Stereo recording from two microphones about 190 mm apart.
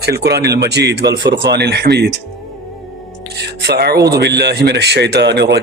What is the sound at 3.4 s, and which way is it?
Music, 60° right (ahead or behind).